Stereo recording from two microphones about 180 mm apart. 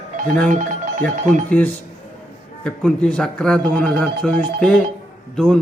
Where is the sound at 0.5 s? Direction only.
45° right (ahead or behind).